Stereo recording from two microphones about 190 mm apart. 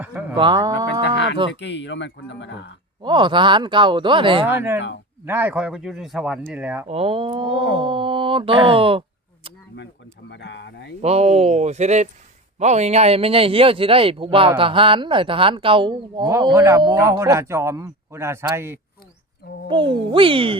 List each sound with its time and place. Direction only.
0.0 s a sound: 10° right (ahead or behind)
0.3 s speech: 25° right (ahead or behind)
1.0 s livestock: 65° left (ahead or behind)
1.5 s speech: 65° left (ahead or behind)
3.0 s a man's voice: 25° right (ahead or behind)
5.2 s speech: 10° right (ahead or behind)
6.8 s a man's voice: 30° right (ahead or behind)
9.7 s speech: 65° left (ahead or behind)
11.0 s a man's voice: 35° right (ahead or behind); by 18.8 s 15° right (ahead or behind)
19.6 s a man's voice: 25° right (ahead or behind)